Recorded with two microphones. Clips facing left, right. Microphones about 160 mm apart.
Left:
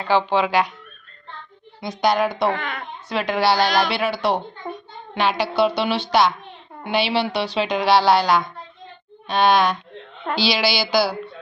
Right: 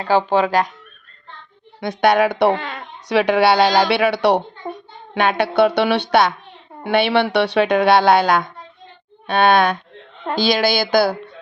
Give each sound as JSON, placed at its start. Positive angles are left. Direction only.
{"t": 0.3, "sound": "speech", "side_deg": -45}
{"t": 1.8, "sound": "a woman's voice", "side_deg": -60}
{"t": 2.5, "sound": "speech", "side_deg": -25}
{"t": 3.1, "sound": "speech", "side_deg": -70}
{"t": 5.1, "sound": "a woman's voice", "side_deg": -55}